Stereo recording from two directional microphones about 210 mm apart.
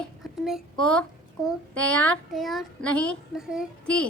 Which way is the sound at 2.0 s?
5° left (ahead or behind).